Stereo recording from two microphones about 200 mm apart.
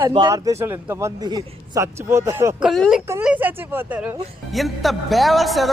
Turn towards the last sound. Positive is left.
turn(degrees=0)  # may be behind; listen again after turning